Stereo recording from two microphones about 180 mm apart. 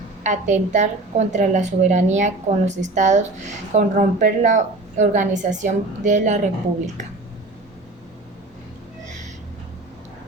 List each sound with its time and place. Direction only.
0.2 s a woman's voice: 40° right (ahead or behind)